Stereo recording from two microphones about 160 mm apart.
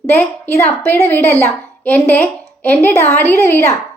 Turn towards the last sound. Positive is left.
turn(degrees=15)  # may be behind; listen again after turning